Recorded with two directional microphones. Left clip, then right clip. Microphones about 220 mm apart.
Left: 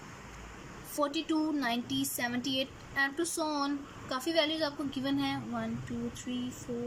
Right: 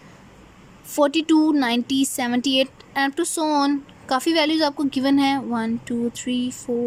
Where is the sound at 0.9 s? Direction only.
45° right (ahead or behind).